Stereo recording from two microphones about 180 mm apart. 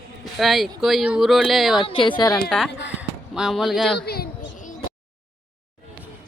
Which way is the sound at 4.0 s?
60° left (ahead or behind).